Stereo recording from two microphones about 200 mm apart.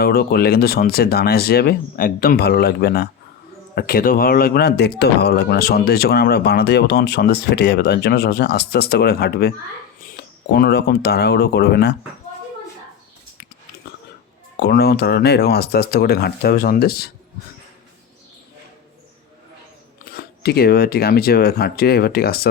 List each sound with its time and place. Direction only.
0.0 s speech: 50° left (ahead or behind)
14.6 s speech: 55° left (ahead or behind)
20.1 s speech: 50° left (ahead or behind)